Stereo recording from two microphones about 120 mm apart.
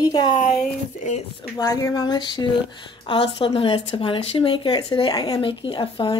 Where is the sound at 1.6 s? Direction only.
30° left (ahead or behind).